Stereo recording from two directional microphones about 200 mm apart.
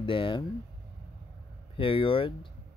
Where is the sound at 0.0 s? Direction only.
25° left (ahead or behind).